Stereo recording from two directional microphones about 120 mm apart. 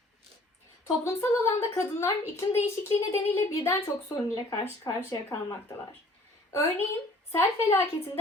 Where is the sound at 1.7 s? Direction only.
20° left (ahead or behind).